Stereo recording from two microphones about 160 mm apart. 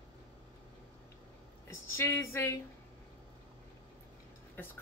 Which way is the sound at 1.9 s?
15° left (ahead or behind).